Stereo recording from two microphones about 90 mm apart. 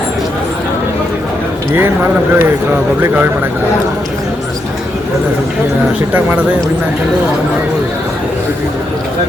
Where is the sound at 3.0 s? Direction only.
25° right (ahead or behind).